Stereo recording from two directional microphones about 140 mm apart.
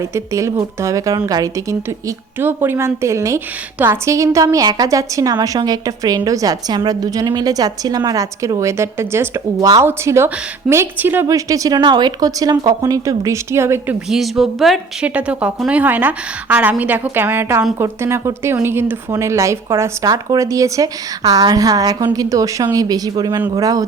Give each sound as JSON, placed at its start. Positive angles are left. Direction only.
{"t": 0.1, "sound": "a woman's voice", "side_deg": -20}
{"t": 2.0, "sound": "a woman's voice", "side_deg": -15}
{"t": 14.1, "sound": "a woman's voice", "side_deg": 0}